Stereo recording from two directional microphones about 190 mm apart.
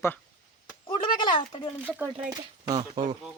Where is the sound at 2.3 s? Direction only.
20° right (ahead or behind).